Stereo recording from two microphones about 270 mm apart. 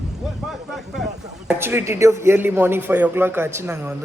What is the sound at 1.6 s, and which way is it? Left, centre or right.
A man's voice, centre.